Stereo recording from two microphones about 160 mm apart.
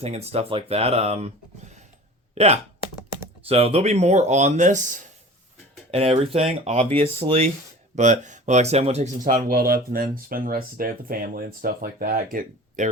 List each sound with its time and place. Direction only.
0.0 s speech: 40° right (ahead or behind)
2.3 s speech: 40° right (ahead or behind)
5.9 s speech: 35° right (ahead or behind)
7.9 s speech: 50° right (ahead or behind)
9.2 s speech: 65° right (ahead or behind)